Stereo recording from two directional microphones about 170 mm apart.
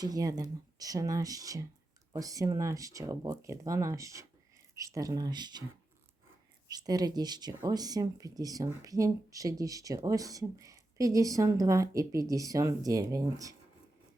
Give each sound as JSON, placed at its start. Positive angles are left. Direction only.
{"t": 0.0, "sound": "speech", "side_deg": -20}
{"t": 6.7, "sound": "speech", "side_deg": -25}